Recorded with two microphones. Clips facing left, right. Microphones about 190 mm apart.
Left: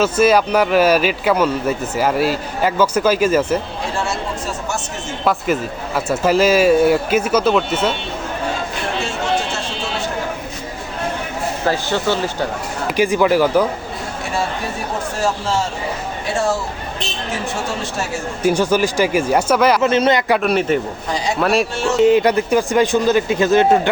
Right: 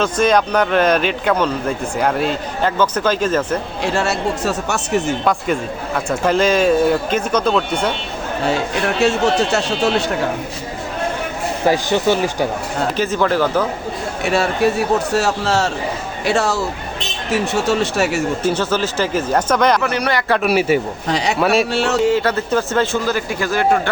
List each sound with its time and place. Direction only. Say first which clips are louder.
0.0 s speech: left 2 dB; 5° left (ahead or behind)
3.9 s speech: right 4 dB; 75° right (ahead or behind)
5.2 s speech: even; 5° left (ahead or behind)
9.0 s speech: right 6 dB; 70° right (ahead or behind)
11.6 s speech: right 4 dB; 15° right (ahead or behind)
13.0 s speech: left 4 dB; 10° left (ahead or behind)
15.1 s speech: right 3 dB; 70° right (ahead or behind)
18.4 s speech: left 3 dB; 10° left (ahead or behind)
19.8 s speech: left 5 dB; 20° left (ahead or behind)
20.4 s speech: right 1 dB; 5° right (ahead or behind)
21.1 s speech: right 3 dB; 70° right (ahead or behind)
21.4 s speech: right 1 dB; centre (ahead or behind)
21.7 s speech: right 2 dB; 65° right (ahead or behind)
22.0 s speech: left 4 dB; 15° left (ahead or behind)